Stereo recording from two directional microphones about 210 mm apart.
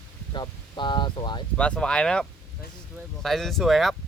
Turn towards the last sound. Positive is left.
turn(degrees=0)  # may be behind; listen again after turning